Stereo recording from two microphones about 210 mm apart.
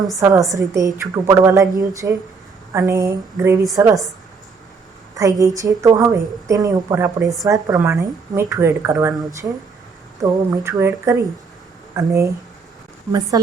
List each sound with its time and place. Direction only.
0.2 s a woman's voice: 15° right (ahead or behind)
5.1 s a woman's voice: 15° right (ahead or behind)
10.2 s a woman's voice: 15° right (ahead or behind)
13.3 s speech: 20° right (ahead or behind)